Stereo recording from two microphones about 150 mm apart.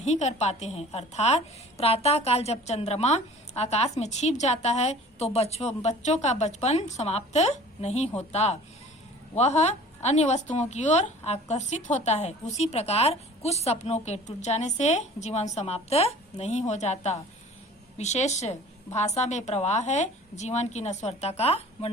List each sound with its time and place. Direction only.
0.0 s a woman's voice: 50° left (ahead or behind)